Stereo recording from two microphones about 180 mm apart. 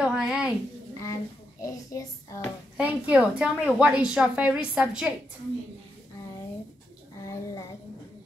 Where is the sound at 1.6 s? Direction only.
20° left (ahead or behind).